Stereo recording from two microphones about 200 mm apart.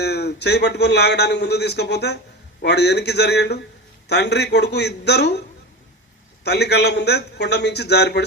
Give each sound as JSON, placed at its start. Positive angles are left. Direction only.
{"t": 0.0, "sound": "a man's voice", "side_deg": 55}
{"t": 6.4, "sound": "a man's voice", "side_deg": 55}